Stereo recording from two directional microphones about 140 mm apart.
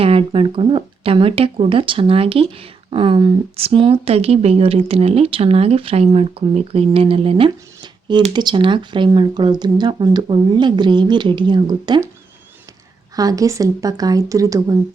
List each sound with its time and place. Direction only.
0.0 s speech: 40° right (ahead or behind)
13.1 s speech: 25° right (ahead or behind)